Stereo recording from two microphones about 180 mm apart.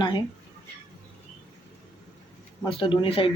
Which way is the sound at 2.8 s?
30° left (ahead or behind).